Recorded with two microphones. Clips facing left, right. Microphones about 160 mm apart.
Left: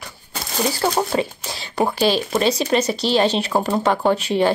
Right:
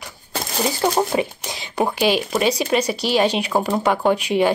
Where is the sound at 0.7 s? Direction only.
20° right (ahead or behind).